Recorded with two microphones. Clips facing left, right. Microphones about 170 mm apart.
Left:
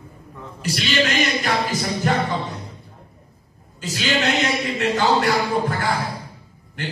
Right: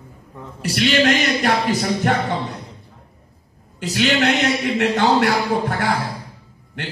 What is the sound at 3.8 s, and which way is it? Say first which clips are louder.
Speech: right 4 dB; 70° right (ahead or behind).